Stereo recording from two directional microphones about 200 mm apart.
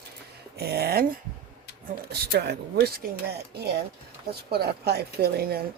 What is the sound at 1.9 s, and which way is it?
Speech, 55° right (ahead or behind).